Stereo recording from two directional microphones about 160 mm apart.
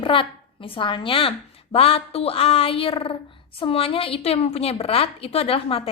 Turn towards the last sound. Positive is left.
turn(degrees=35)  # may be behind; listen again after turning